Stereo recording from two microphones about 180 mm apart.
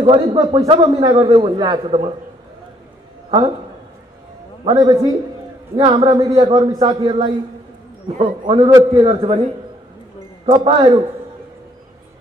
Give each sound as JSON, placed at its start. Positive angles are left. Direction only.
{"t": 0.0, "sound": "a man's voice", "side_deg": -30}
{"t": 3.3, "sound": "a man's voice", "side_deg": -25}
{"t": 4.6, "sound": "a man's voice", "side_deg": -25}
{"t": 10.4, "sound": "speech", "side_deg": -30}